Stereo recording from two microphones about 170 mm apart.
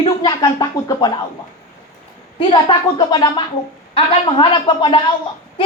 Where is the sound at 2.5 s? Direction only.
25° left (ahead or behind).